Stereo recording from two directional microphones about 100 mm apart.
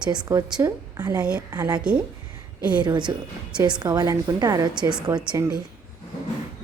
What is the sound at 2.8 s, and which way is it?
A woman's voice, 50° right (ahead or behind).